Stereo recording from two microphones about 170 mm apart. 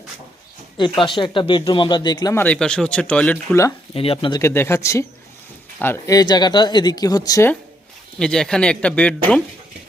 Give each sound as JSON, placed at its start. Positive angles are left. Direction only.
{"t": 0.8, "sound": "speech", "side_deg": 30}
{"t": 2.4, "sound": "speech", "side_deg": 5}
{"t": 3.9, "sound": "speech", "side_deg": 35}
{"t": 4.4, "sound": "speech", "side_deg": 15}
{"t": 8.2, "sound": "speech", "side_deg": 5}